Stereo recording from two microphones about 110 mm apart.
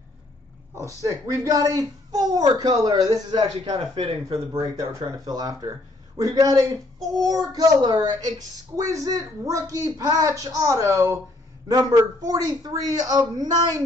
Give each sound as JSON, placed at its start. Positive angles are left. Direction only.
{"t": 1.0, "sound": "speech", "side_deg": -30}
{"t": 3.9, "sound": "speech", "side_deg": -55}
{"t": 4.5, "sound": "speech", "side_deg": -35}